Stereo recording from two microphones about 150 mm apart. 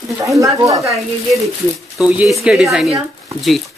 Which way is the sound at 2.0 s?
10° right (ahead or behind).